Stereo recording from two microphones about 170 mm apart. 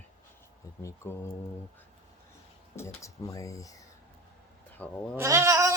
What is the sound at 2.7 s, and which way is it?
Speech, 15° left (ahead or behind).